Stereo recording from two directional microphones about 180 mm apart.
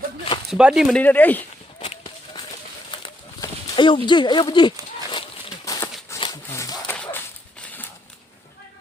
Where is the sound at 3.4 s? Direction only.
25° left (ahead or behind).